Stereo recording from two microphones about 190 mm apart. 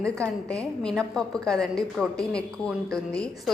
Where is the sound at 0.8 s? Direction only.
5° left (ahead or behind).